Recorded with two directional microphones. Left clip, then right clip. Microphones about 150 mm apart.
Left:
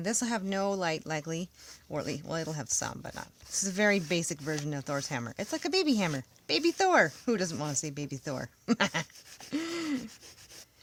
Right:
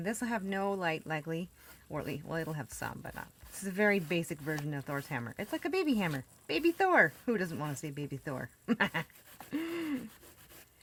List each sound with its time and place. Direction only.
0.0 s speech: 45° left (ahead or behind)